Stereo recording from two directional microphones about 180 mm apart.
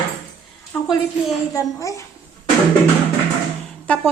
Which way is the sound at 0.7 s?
10° left (ahead or behind).